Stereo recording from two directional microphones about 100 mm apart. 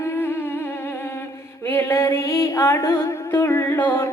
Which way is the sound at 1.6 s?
25° left (ahead or behind).